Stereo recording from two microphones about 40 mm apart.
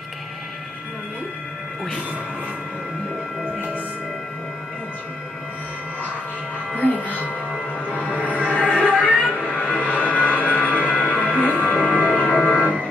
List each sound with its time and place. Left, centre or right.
6.8 s music: left
8.2 s music: left